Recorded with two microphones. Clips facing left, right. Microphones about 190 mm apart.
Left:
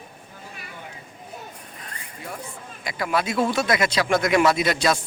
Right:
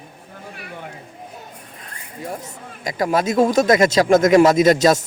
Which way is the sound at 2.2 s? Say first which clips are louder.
Right 5 dB; 40° right (ahead or behind).